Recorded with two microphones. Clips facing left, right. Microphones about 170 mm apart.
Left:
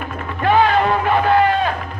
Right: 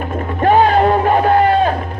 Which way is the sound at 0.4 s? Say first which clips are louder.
Right 4 dB; 45° right (ahead or behind).